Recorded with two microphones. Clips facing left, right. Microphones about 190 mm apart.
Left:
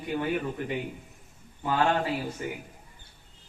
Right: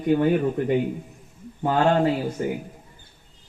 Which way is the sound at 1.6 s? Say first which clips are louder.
Right 6 dB; 45° right (ahead or behind).